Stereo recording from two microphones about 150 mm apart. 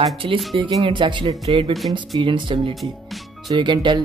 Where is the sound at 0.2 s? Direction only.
40° right (ahead or behind).